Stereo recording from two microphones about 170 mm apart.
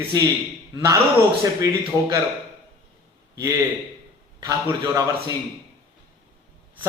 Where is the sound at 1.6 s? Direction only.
20° right (ahead or behind).